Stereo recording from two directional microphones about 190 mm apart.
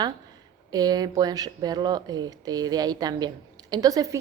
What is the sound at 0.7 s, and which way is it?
A woman's voice, 20° right (ahead or behind).